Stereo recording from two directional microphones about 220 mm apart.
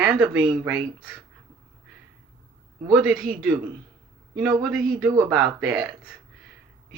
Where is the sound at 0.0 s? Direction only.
10° right (ahead or behind).